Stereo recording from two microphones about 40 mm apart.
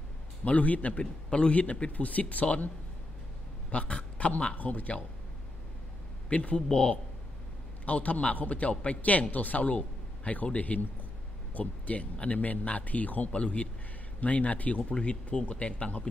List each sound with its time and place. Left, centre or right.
0.5 s a man's voice: left
3.7 s a man's voice: left
6.2 s a man's voice: left
7.8 s a man's voice: left
11.8 s a man's voice: left
13.3 s a man's voice: left